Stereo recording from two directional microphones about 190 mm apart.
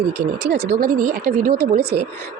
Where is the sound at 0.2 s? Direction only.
60° right (ahead or behind).